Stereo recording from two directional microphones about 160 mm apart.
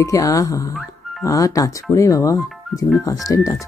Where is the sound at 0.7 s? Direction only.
Centre (ahead or behind).